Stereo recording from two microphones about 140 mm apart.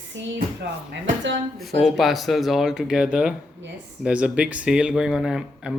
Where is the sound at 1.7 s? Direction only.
Centre (ahead or behind).